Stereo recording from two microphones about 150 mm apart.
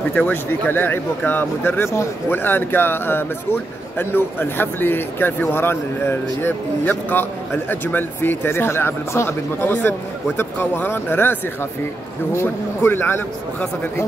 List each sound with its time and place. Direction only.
0.1 s speech: 10° left (ahead or behind)
12.4 s speech: 15° left (ahead or behind)